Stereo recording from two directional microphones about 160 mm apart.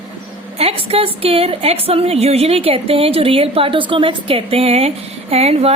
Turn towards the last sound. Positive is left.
turn(degrees=-40)  # may be behind; listen again after turning